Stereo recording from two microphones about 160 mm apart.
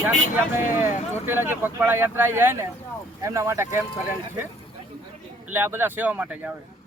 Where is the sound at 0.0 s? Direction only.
15° right (ahead or behind).